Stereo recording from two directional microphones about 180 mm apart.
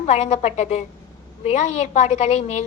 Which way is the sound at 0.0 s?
40° left (ahead or behind).